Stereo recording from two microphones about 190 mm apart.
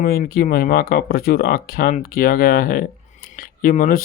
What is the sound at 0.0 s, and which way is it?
Speech, 50° left (ahead or behind).